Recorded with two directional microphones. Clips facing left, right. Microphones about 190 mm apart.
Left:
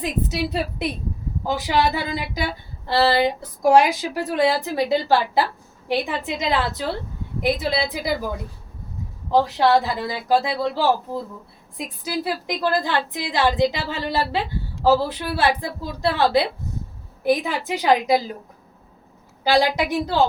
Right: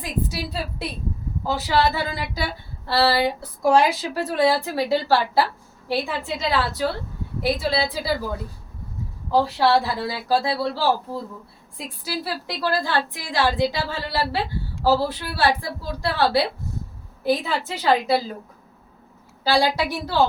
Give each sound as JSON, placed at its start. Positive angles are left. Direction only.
{"t": 0.0, "sound": "a woman's voice", "side_deg": 20}
{"t": 9.3, "sound": "a woman's voice", "side_deg": 20}
{"t": 19.5, "sound": "speech", "side_deg": 15}